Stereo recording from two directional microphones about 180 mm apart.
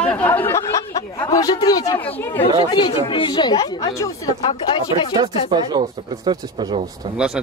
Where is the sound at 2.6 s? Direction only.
25° left (ahead or behind).